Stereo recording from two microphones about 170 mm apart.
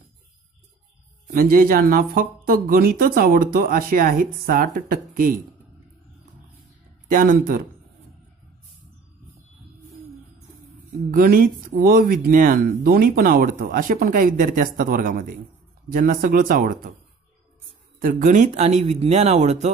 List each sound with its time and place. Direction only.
1.3 s speech: 60° right (ahead or behind)
7.1 s speech: 55° right (ahead or behind)
11.1 s speech: 55° right (ahead or behind)
18.0 s speech: 50° right (ahead or behind)